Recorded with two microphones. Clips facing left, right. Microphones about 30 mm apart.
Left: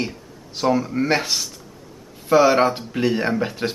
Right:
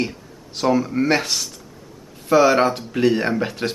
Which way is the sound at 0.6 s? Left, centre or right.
Centre.